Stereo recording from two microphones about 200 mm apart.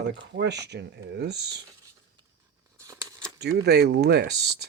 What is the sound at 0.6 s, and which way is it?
Speech, 55° right (ahead or behind).